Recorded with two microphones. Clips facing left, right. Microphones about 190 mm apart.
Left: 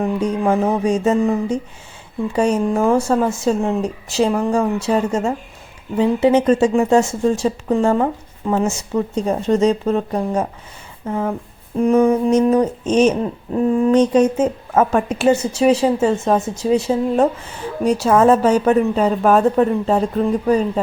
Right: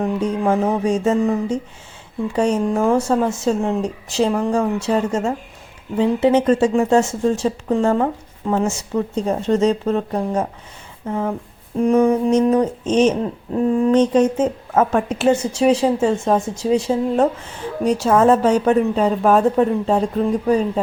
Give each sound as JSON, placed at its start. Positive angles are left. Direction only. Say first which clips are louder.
{"t": 0.0, "sound": "speech", "louder": "left 1 dB", "side_deg": 10}
{"t": 11.0, "sound": "speech", "louder": "left 1 dB", "side_deg": 0}